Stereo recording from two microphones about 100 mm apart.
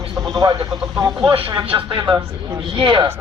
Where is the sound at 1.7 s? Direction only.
50° right (ahead or behind).